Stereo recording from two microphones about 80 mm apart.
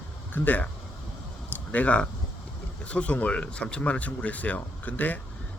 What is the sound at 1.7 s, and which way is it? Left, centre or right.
Speech, centre.